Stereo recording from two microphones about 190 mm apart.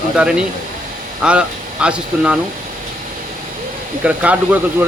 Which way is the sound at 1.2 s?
5° right (ahead or behind).